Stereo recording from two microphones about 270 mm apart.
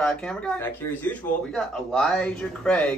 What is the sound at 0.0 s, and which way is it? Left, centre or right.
Speech, centre.